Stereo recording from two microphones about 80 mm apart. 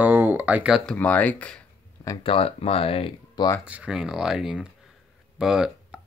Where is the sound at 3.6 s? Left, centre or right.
Centre.